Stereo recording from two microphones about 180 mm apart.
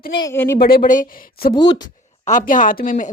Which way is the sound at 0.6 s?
55° left (ahead or behind).